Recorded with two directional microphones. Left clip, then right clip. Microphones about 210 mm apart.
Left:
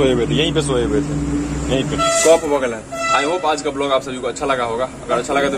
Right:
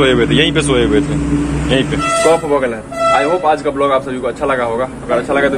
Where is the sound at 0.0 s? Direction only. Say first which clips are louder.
Right 5 dB; 5° left (ahead or behind).